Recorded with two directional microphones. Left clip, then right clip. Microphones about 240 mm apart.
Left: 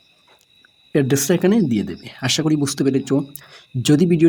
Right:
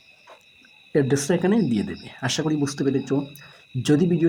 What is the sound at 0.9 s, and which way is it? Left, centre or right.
Speech, left.